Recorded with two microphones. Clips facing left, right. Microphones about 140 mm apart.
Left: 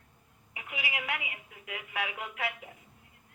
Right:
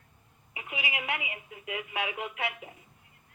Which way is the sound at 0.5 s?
10° right (ahead or behind).